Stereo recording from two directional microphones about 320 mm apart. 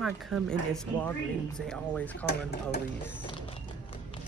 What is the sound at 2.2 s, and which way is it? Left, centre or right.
Speech, left.